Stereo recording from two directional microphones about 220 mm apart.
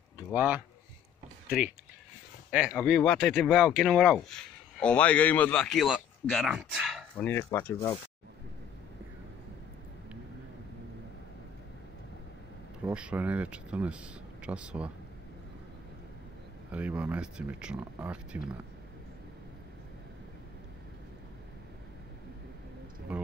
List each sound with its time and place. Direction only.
0.3 s speech: 5° right (ahead or behind)
2.5 s speech: 5° right (ahead or behind)
12.8 s speech: 5° right (ahead or behind)
16.7 s speech: 5° right (ahead or behind)
23.1 s speech: 5° right (ahead or behind)